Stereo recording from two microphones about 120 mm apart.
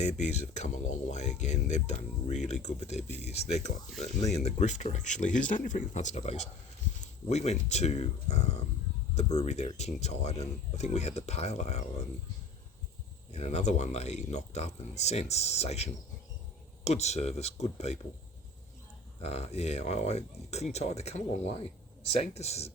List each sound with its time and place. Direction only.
0.0 s speech: 70° left (ahead or behind)
13.3 s speech: 65° left (ahead or behind)
19.2 s speech: 60° left (ahead or behind)